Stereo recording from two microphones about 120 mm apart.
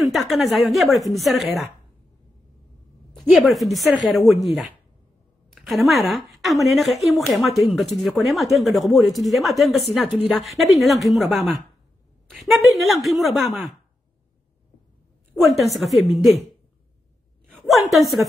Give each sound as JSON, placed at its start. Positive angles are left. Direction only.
{"t": 0.0, "sound": "a woman's voice", "side_deg": 0}
{"t": 3.1, "sound": "a woman's voice", "side_deg": 0}
{"t": 5.5, "sound": "a woman's voice", "side_deg": 0}
{"t": 6.3, "sound": "a sound", "side_deg": 0}
{"t": 6.7, "sound": "speech", "side_deg": 0}
{"t": 15.3, "sound": "a woman's voice", "side_deg": 0}
{"t": 17.5, "sound": "a sound", "side_deg": 0}